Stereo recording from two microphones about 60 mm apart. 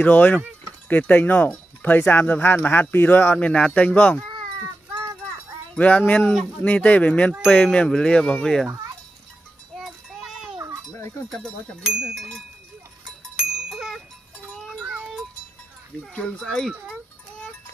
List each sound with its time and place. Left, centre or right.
0.0 s speech: left
3.3 s speech: centre
5.0 s a sound: right
5.8 s speech: left
11.8 s speech: centre
12.2 s speech: centre
13.7 s music: centre
16.4 s speech: centre